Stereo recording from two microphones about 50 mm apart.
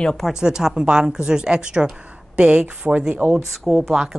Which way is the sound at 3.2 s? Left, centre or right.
Right.